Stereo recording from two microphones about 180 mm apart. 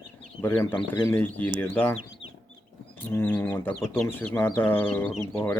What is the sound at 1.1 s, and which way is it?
Speech, 10° left (ahead or behind).